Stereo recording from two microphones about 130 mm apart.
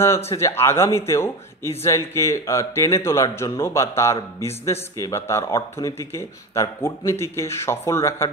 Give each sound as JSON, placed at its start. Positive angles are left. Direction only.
{"t": 0.3, "sound": "speech", "side_deg": 20}